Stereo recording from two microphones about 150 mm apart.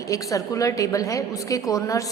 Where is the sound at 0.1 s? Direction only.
20° left (ahead or behind).